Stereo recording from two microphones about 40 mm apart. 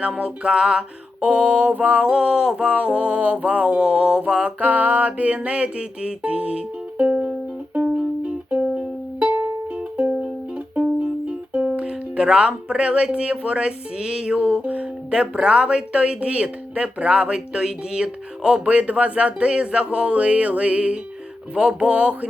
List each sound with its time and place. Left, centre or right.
0.2 s speech: right
1.2 s speech: right
2.2 s a sound: centre
2.6 s speech: right
4.6 s music: right
11.7 s speech: right
14.3 s speech: right
18.6 s speech: right